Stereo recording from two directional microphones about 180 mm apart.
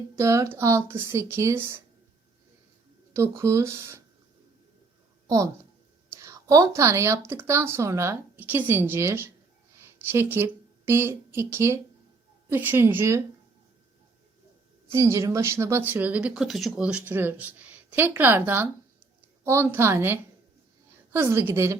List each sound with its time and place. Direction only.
0.2 s speech: 15° right (ahead or behind)
3.1 s speech: 15° right (ahead or behind)
6.2 s speech: 15° right (ahead or behind)
14.9 s speech: 15° right (ahead or behind)